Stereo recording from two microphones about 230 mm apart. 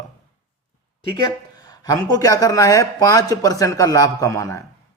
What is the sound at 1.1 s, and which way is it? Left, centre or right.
Speech, centre.